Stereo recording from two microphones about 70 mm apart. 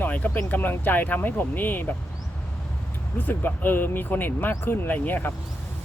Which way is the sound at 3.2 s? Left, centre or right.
Left.